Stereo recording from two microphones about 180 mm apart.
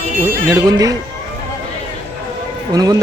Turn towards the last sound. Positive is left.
turn(degrees=-20)  # may be behind; listen again after turning